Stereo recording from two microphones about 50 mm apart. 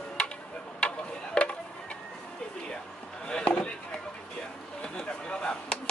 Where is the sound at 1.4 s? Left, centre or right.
Left.